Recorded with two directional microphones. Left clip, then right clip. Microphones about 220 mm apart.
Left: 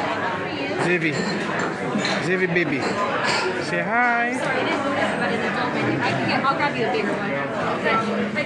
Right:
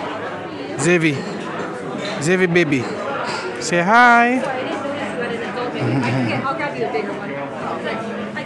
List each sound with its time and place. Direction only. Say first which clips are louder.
0.8 s speech: right 7 dB; 55° right (ahead or behind)
2.2 s speech: right 9 dB; 50° right (ahead or behind)